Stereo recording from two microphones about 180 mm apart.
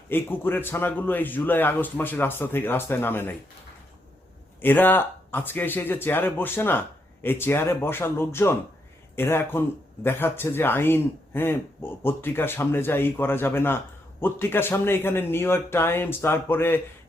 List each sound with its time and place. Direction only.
0.1 s speech: 10° left (ahead or behind)
4.6 s speech: 10° left (ahead or behind)